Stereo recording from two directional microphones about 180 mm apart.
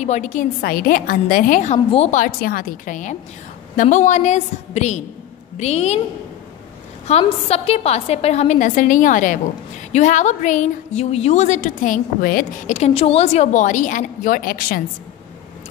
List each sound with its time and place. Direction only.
0.0 s a woman's voice: 40° left (ahead or behind)
7.1 s a woman's voice: 35° left (ahead or behind); by 14.8 s 55° left (ahead or behind)